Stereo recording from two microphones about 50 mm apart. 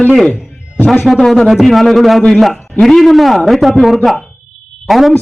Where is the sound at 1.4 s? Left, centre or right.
Centre.